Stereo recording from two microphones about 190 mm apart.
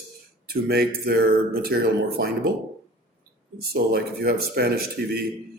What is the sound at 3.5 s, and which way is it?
Speech, 55° right (ahead or behind).